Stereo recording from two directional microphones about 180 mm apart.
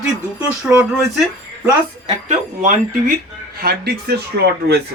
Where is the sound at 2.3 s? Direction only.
45° right (ahead or behind).